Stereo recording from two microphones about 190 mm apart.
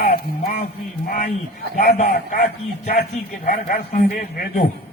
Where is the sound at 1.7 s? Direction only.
55° left (ahead or behind).